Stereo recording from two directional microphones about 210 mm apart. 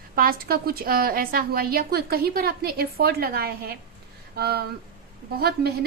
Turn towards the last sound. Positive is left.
turn(degrees=-50)  # may be behind; listen again after turning